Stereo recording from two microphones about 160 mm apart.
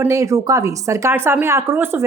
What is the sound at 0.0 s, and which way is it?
Speech, 20° right (ahead or behind).